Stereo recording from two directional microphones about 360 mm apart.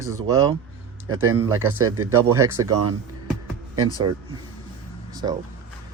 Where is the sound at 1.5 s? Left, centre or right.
Centre.